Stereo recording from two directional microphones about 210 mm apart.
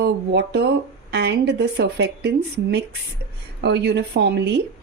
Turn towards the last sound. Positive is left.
turn(degrees=-55)  # may be behind; listen again after turning